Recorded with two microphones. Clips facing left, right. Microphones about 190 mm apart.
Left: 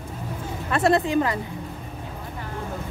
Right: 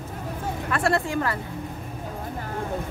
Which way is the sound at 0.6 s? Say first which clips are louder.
Left 4 dB; 20° left (ahead or behind).